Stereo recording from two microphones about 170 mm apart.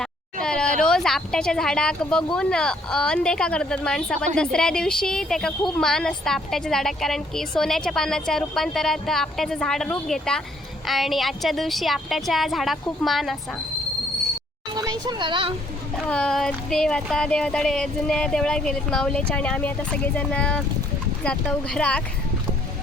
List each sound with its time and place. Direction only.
0.0 s a sound: 5° left (ahead or behind)
0.8 s a woman's voice: 5° left (ahead or behind)
14.7 s a child's voice: 25° right (ahead or behind)
16.0 s a woman's voice: 5° left (ahead or behind)